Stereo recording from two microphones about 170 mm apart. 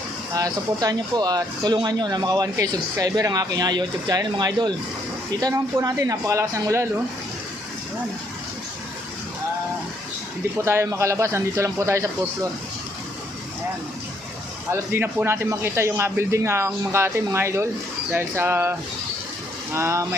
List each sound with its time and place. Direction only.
0.3 s speech: 20° right (ahead or behind)
10.7 s speech: 15° right (ahead or behind)
14.7 s speech: 10° right (ahead or behind)